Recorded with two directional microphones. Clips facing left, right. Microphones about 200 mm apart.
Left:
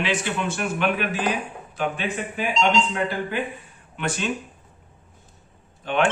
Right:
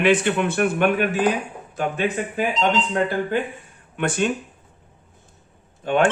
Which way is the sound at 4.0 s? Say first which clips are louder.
Right 5 dB; 50° right (ahead or behind).